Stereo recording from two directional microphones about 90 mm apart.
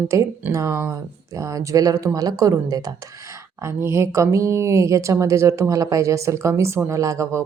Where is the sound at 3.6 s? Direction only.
30° right (ahead or behind).